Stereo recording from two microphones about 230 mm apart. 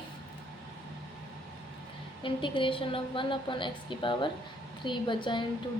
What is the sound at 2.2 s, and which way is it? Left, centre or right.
A woman's voice, left.